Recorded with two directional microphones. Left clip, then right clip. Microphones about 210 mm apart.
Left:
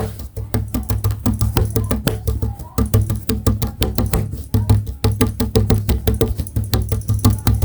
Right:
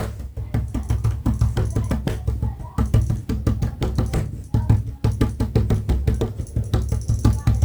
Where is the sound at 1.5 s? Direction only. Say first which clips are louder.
Left 6 dB; 50° left (ahead or behind).